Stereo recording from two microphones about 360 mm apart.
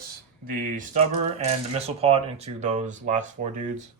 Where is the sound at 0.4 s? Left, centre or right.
Right.